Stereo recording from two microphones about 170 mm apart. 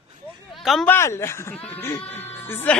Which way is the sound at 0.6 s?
Centre (ahead or behind).